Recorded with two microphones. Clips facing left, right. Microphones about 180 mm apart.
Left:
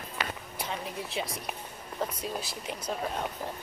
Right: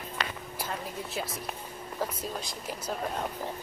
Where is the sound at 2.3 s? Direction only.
5° left (ahead or behind).